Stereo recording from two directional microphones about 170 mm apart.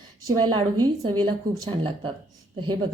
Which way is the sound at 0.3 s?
25° right (ahead or behind).